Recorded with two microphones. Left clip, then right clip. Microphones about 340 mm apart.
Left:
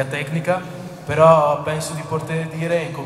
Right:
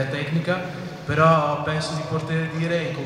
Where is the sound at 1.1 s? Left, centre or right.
Centre.